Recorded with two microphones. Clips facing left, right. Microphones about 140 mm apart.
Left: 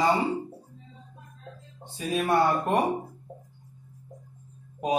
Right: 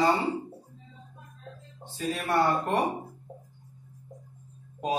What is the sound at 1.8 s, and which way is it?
Speech, 15° left (ahead or behind).